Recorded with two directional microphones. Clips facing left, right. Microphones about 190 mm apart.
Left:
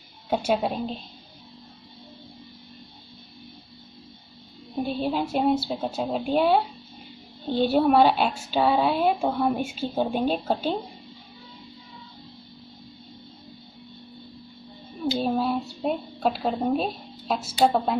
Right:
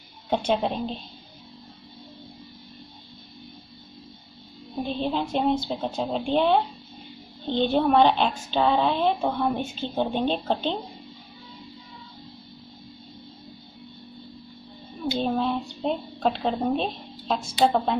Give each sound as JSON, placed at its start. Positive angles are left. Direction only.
{"t": 0.3, "sound": "a woman's voice", "side_deg": 5}
{"t": 4.8, "sound": "a woman's voice", "side_deg": 10}
{"t": 15.1, "sound": "a woman's voice", "side_deg": 5}